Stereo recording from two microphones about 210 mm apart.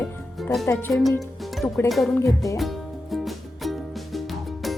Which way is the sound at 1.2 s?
Centre (ahead or behind).